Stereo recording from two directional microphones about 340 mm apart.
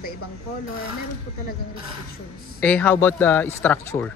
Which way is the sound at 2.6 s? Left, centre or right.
Centre.